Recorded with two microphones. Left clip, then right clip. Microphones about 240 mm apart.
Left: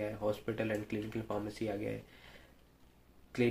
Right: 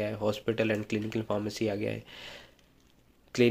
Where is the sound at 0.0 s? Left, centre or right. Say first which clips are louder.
Right 6 dB; right.